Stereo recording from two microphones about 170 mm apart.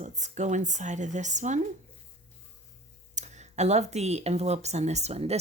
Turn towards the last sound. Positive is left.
turn(degrees=-40)  # may be behind; listen again after turning